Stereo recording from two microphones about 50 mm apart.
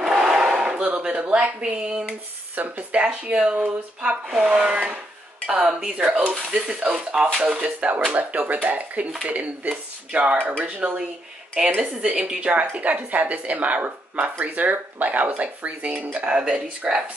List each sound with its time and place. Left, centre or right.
0.0 s battle cry: centre
0.6 s a sound: centre
0.8 s a woman's voice: right
2.5 s speech: right
3.0 s a woman's voice: right
11.5 s a woman's voice: centre